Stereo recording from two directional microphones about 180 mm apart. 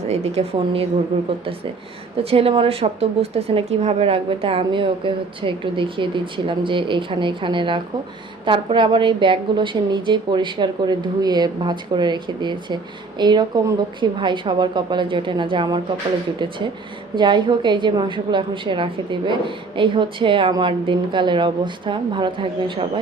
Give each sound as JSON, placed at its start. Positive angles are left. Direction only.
{"t": 0.1, "sound": "speech", "side_deg": -35}
{"t": 2.1, "sound": "a woman's voice", "side_deg": -30}
{"t": 17.2, "sound": "a woman's voice", "side_deg": -25}